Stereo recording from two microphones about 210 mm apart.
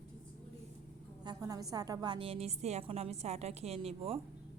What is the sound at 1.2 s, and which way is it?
A woman's voice, 20° right (ahead or behind).